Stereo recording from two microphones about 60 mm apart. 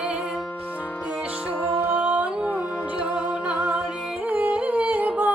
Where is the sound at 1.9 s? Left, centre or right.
Right.